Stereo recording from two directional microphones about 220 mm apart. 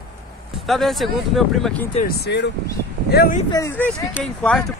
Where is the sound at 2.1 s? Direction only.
50° left (ahead or behind).